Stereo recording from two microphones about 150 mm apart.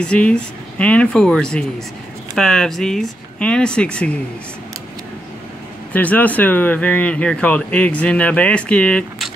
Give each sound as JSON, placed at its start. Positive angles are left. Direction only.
{"t": 0.0, "sound": "speech", "side_deg": 5}
{"t": 5.9, "sound": "speech", "side_deg": 10}